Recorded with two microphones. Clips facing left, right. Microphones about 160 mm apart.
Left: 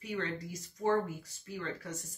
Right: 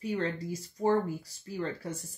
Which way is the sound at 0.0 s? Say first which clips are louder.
Right 5 dB; 30° right (ahead or behind).